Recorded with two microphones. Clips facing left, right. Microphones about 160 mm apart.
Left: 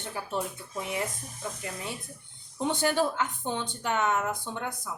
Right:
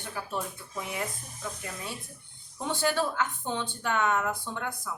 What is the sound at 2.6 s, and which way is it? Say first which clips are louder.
A woman's voice: left 2 dB; 20° left (ahead or behind).